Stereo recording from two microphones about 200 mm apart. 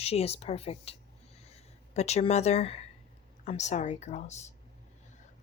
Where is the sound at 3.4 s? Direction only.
35° left (ahead or behind).